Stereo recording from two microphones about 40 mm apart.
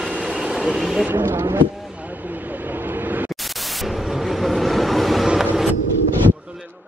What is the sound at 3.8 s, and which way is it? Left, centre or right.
Vehicle, centre.